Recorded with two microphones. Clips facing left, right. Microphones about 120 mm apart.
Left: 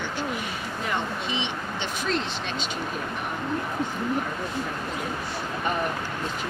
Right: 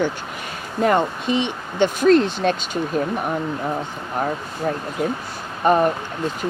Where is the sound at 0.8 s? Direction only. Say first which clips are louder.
Right 12 dB; 50° right (ahead or behind).